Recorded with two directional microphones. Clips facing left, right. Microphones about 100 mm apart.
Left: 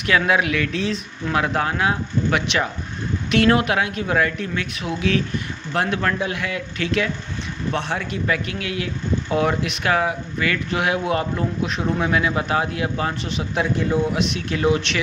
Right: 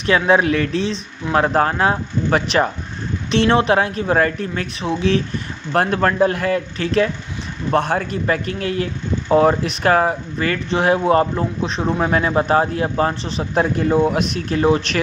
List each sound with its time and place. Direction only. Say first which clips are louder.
0.0 s speech: right 4 dB; 30° right (ahead or behind)
3.3 s speech: right 2 dB; 30° right (ahead or behind)
5.7 s speech: right 5 dB; 45° right (ahead or behind)